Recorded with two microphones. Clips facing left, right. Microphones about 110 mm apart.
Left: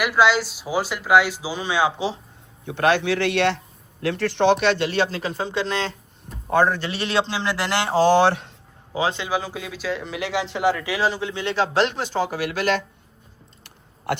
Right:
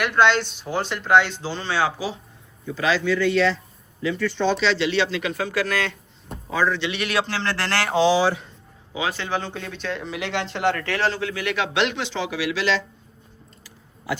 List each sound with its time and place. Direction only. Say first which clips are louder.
0.0 s speech: even; 5° left (ahead or behind)
2.6 s a man's voice: left 2 dB; 60° left (ahead or behind); by 6.0 s 30° left (ahead or behind)
6.5 s a man's voice: left 3 dB; 50° left (ahead or behind); by 7.9 s 15° left (ahead or behind)
8.0 s a man's voice: left 4 dB; 60° left (ahead or behind)
8.9 s a man's voice: left 4 dB; 35° left (ahead or behind)
9.1 s speech: left 1 dB; 10° left (ahead or behind); by 12.8 s 50° left (ahead or behind)
13.7 s a sound: left 3 dB; 65° left (ahead or behind)